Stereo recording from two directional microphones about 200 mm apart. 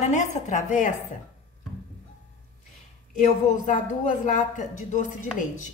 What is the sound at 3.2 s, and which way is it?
Speech, 40° left (ahead or behind).